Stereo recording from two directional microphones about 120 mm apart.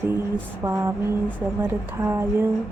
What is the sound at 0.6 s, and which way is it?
A woman's voice, 25° right (ahead or behind).